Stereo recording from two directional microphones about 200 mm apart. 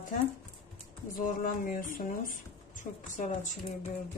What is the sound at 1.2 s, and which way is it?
Speech, 40° left (ahead or behind).